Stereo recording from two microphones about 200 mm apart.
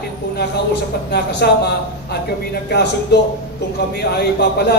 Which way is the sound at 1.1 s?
55° left (ahead or behind).